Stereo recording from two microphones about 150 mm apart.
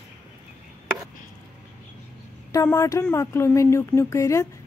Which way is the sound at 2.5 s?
20° left (ahead or behind).